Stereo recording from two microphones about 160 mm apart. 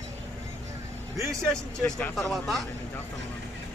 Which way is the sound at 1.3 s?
5° left (ahead or behind).